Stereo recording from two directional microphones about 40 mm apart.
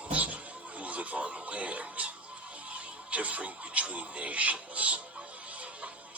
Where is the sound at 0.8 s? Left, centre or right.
Right.